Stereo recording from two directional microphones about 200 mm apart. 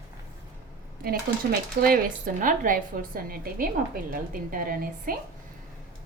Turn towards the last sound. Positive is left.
turn(degrees=-45)  # may be behind; listen again after turning